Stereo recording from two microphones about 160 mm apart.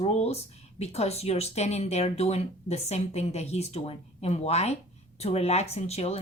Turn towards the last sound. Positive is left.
turn(degrees=40)  # may be behind; listen again after turning